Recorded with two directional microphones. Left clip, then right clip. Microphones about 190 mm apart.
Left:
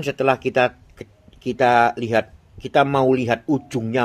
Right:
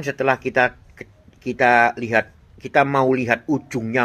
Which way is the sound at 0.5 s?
50° left (ahead or behind).